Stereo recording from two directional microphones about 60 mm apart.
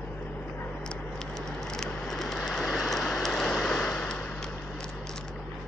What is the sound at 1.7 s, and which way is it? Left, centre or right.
Vehicle, centre.